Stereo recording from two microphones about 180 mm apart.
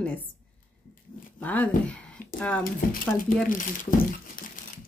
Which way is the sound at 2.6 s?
50° left (ahead or behind).